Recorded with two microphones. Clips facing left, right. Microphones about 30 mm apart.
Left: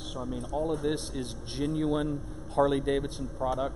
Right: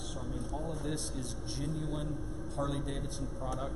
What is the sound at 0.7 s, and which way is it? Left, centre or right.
Speech, left.